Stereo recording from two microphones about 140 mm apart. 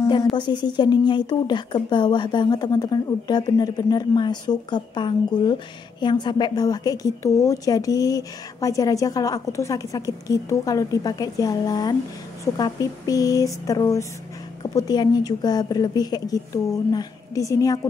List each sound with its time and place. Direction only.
0.0 s a woman's voice: 35° left (ahead or behind)